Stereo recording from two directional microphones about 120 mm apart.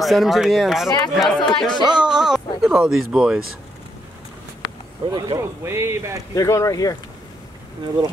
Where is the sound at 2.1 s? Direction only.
5° right (ahead or behind).